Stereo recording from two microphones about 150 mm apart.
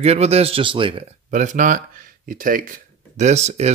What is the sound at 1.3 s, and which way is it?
Speech, 55° right (ahead or behind).